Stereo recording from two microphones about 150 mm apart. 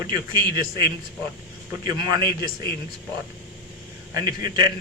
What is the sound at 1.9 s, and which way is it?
Speech, 25° right (ahead or behind).